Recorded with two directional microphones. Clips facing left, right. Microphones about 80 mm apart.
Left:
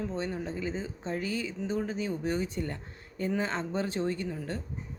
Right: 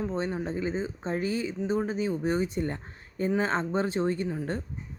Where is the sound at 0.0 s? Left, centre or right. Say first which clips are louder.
Right 3 dB; right.